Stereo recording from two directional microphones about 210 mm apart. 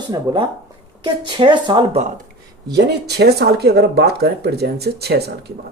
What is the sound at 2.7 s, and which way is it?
Speech, 50° right (ahead or behind).